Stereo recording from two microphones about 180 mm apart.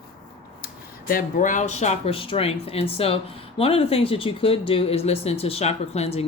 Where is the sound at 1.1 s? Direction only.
50° left (ahead or behind).